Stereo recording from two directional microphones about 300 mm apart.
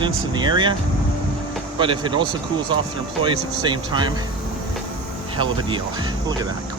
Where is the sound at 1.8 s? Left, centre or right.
Centre.